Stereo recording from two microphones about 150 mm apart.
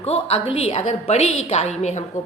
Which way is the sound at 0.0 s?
45° left (ahead or behind).